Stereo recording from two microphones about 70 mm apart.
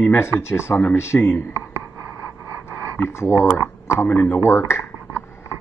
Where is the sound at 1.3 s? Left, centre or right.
Left.